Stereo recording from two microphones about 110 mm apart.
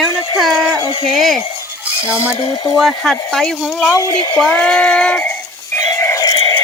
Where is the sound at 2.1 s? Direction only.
25° left (ahead or behind).